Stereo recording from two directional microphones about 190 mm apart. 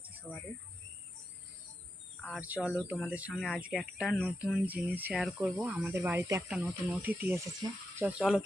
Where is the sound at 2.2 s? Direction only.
5° right (ahead or behind).